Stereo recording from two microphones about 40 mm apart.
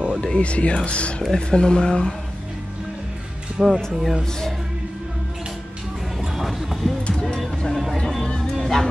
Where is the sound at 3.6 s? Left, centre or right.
Centre.